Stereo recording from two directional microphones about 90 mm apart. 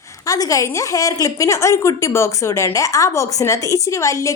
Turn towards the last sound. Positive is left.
turn(degrees=35)  # may be behind; listen again after turning